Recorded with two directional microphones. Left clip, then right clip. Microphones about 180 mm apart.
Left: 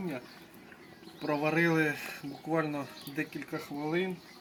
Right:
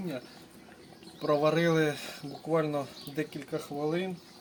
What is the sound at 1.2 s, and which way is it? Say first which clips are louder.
Speech: right 3 dB; 50° right (ahead or behind).